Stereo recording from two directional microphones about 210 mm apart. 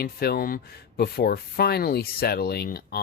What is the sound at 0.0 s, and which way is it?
Speech, 45° left (ahead or behind).